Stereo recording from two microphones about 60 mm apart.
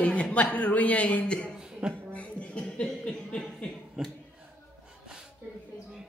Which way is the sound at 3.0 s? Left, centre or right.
Centre.